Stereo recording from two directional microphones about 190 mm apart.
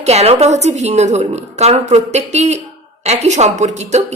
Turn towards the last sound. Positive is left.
turn(degrees=-35)  # may be behind; listen again after turning